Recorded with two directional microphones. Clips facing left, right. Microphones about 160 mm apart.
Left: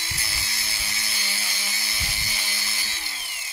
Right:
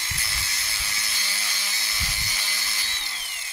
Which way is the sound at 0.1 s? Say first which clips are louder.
Even; 10° left (ahead or behind).